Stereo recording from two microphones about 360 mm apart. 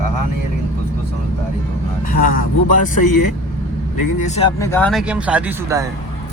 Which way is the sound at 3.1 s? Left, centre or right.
Left.